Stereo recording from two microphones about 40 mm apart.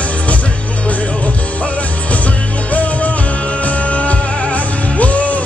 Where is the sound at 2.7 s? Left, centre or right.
Left.